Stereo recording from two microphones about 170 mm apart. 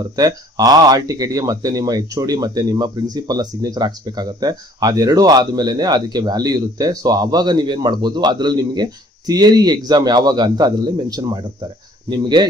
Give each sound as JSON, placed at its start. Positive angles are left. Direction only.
{"t": 0.1, "sound": "speech", "side_deg": -20}